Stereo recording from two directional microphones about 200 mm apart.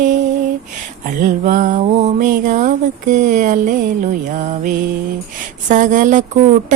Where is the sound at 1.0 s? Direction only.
40° right (ahead or behind).